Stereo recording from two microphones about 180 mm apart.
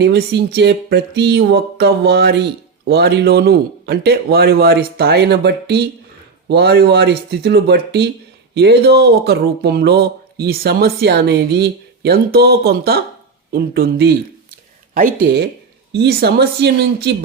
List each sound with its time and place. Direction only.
0.0 s speech: 65° right (ahead or behind)
15.2 s speech: 65° right (ahead or behind)